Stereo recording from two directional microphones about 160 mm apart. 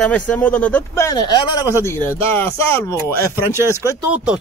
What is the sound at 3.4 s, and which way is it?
Speech, 15° right (ahead or behind).